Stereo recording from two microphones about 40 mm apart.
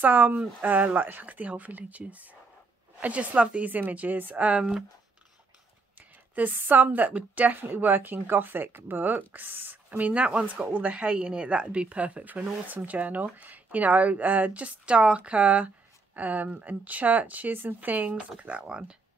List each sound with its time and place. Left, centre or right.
0.0 s speech: right
4.5 s speech: right
5.9 s a woman's voice: right
7.5 s speech: right
9.9 s speech: right
18.4 s speech: right